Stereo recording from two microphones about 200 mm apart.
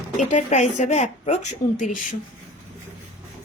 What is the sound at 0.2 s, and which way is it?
Speech, 40° left (ahead or behind).